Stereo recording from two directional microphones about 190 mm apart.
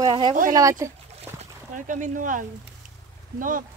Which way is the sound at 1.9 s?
45° right (ahead or behind).